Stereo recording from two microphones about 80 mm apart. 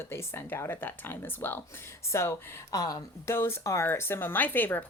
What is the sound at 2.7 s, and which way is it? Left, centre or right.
Speech, left.